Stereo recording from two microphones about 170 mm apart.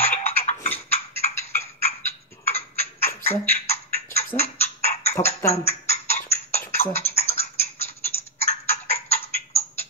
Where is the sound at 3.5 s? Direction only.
40° left (ahead or behind).